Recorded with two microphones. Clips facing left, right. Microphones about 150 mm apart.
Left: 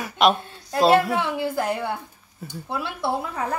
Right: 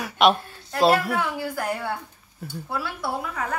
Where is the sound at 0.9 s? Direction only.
25° left (ahead or behind).